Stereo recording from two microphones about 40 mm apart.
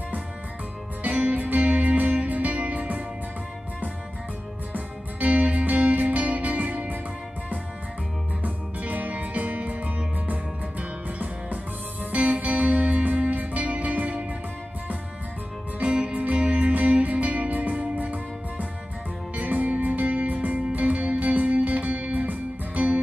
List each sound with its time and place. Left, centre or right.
1.0 s music: right
4.7 s music: right
8.4 s music: right
15.8 s music: right